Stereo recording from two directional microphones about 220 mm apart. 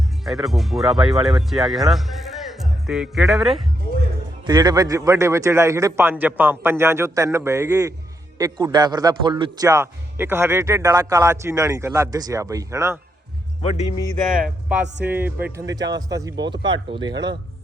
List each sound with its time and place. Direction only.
0.3 s speech: centre (ahead or behind)
4.4 s a man's voice: 15° right (ahead or behind)
13.6 s speech: 25° left (ahead or behind)
14.3 s a man's voice: 5° right (ahead or behind); by 17.3 s 20° right (ahead or behind)